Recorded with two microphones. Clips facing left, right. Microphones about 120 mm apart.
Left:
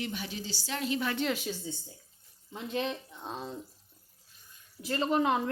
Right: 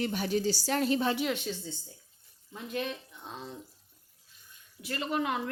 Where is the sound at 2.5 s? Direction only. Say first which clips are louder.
Left 2 dB; 30° left (ahead or behind).